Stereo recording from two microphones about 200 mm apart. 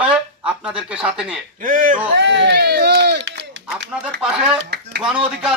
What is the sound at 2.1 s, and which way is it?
Speech, 60° right (ahead or behind).